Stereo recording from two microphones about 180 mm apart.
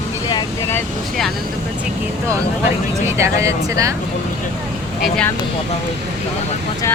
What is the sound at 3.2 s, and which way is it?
Speech, 15° right (ahead or behind).